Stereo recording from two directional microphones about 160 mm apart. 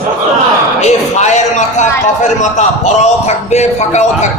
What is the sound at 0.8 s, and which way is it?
A man's voice, 45° left (ahead or behind).